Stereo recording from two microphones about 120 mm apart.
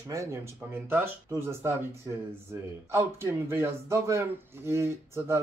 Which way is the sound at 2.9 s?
20° right (ahead or behind).